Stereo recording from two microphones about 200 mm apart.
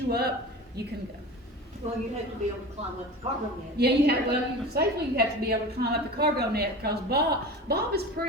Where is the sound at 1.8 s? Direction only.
30° right (ahead or behind).